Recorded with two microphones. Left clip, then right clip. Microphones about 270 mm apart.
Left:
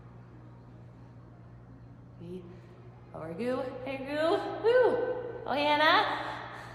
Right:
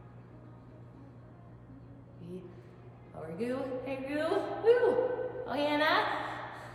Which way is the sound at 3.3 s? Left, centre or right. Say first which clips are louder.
Left 2 dB; centre.